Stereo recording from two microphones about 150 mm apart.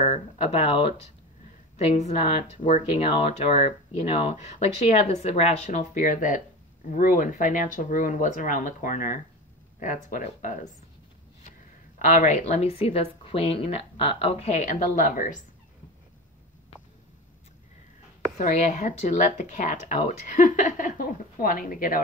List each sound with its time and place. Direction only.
0.0 s speech: 50° left (ahead or behind)
2.0 s speech: 50° left (ahead or behind)
12.0 s speech: 50° left (ahead or behind)
18.4 s speech: 60° left (ahead or behind)